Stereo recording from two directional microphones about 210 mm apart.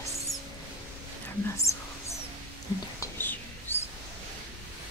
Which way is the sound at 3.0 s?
10° left (ahead or behind).